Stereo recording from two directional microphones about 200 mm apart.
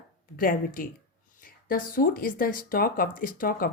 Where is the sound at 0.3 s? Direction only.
45° left (ahead or behind).